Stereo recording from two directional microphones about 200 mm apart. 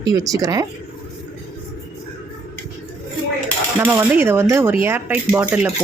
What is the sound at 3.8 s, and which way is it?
A woman's voice, 10° right (ahead or behind).